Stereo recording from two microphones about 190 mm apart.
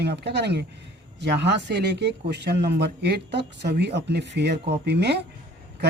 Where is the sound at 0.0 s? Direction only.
60° right (ahead or behind).